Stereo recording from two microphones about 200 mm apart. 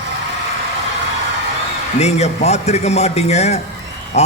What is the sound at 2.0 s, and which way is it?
A man's voice, 35° left (ahead or behind).